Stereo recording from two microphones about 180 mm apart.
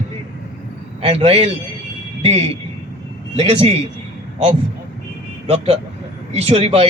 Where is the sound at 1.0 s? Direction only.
35° right (ahead or behind).